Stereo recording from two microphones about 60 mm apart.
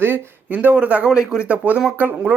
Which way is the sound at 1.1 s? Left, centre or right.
Centre.